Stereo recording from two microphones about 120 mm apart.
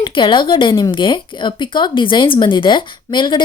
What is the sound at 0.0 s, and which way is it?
A woman's voice, 40° left (ahead or behind).